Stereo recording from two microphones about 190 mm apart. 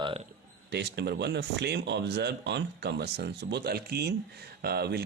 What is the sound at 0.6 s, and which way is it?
Speech, 60° right (ahead or behind).